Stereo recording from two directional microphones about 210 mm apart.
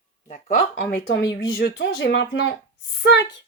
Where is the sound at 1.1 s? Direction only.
50° left (ahead or behind).